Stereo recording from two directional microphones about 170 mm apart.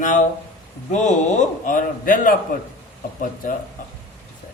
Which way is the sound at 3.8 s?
55° left (ahead or behind).